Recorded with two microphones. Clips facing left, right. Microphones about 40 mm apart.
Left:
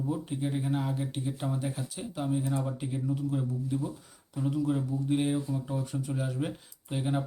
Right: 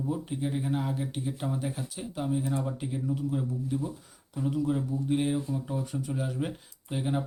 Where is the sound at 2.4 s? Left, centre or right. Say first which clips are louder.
Right 1 dB; right.